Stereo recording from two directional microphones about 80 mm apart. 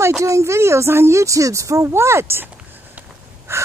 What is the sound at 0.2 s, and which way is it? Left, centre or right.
Speech, right.